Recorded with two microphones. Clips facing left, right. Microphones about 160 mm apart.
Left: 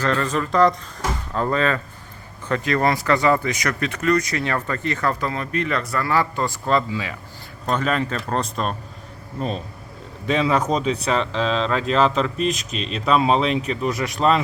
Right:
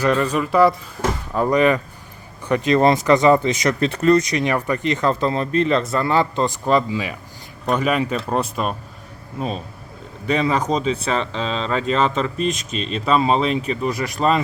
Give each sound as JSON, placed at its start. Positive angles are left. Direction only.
{"t": 0.0, "sound": "speech", "side_deg": -10}
{"t": 10.2, "sound": "speech", "side_deg": 0}